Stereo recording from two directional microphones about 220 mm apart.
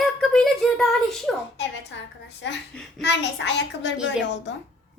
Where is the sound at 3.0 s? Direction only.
50° left (ahead or behind).